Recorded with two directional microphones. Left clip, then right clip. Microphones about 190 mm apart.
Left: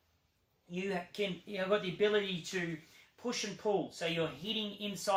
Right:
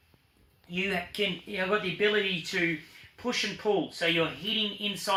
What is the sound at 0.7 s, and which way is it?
Speech, 40° left (ahead or behind).